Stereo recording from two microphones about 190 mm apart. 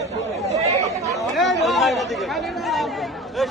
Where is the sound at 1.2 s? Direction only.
Centre (ahead or behind).